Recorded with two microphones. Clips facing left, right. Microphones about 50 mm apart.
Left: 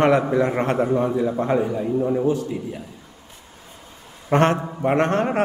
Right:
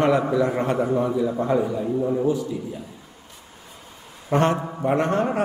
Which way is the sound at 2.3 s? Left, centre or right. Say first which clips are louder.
Left 1 dB; left.